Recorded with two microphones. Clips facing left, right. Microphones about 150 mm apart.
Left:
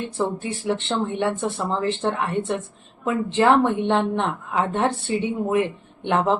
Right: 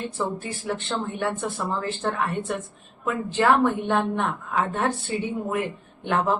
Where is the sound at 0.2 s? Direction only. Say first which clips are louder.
Left 6 dB; 25° left (ahead or behind).